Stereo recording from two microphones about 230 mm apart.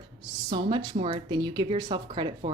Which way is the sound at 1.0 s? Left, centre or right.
Centre.